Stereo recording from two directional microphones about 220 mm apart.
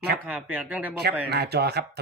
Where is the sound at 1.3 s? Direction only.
45° right (ahead or behind).